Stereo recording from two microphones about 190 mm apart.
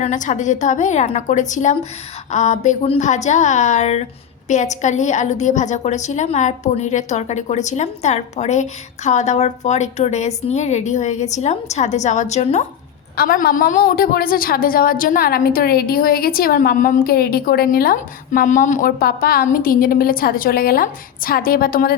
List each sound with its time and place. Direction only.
0.0 s a woman's voice: 40° left (ahead or behind)
13.1 s a woman's voice: 50° left (ahead or behind)